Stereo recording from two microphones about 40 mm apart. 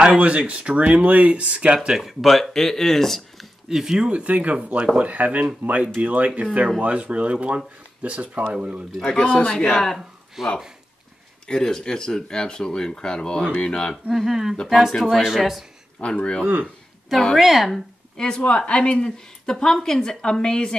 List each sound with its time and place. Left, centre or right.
0.0 s speech: right
2.0 s speech: centre
3.6 s speech: centre
4.1 s speech: right
9.1 s speech: left
10.4 s speech: centre
11.4 s speech: centre
14.1 s speech: centre
14.9 s speech: centre
15.2 s speech: centre
16.0 s speech: left
17.4 s speech: centre
18.1 s a woman's voice: centre